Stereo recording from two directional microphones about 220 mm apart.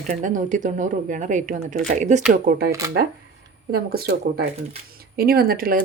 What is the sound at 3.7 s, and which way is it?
Speech, 45° right (ahead or behind).